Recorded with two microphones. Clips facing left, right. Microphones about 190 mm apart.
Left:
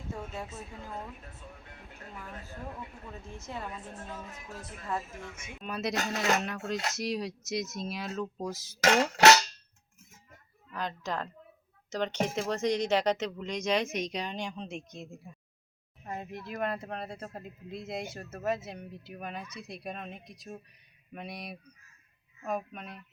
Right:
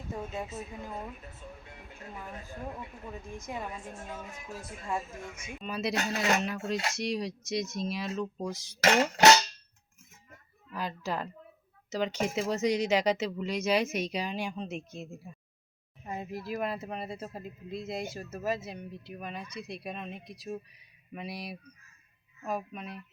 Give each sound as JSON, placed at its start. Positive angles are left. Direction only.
{"t": 0.1, "sound": "speech", "side_deg": -15}
{"t": 2.1, "sound": "speech", "side_deg": -15}
{"t": 5.5, "sound": "speech", "side_deg": 0}
{"t": 10.7, "sound": "speech", "side_deg": -5}